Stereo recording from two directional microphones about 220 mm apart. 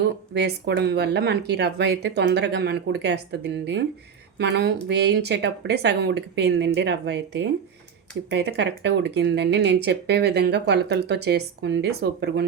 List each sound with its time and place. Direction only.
0.3 s speech: 50° right (ahead or behind)